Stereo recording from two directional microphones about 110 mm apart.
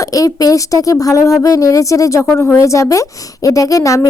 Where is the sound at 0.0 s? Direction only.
30° left (ahead or behind).